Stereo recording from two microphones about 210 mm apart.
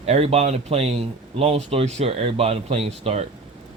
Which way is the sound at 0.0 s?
30° right (ahead or behind).